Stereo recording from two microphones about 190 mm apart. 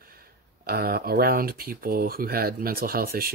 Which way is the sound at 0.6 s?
55° right (ahead or behind).